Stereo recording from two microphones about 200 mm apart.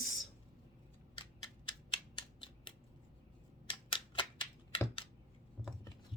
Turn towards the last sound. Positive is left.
turn(degrees=10)  # may be behind; listen again after turning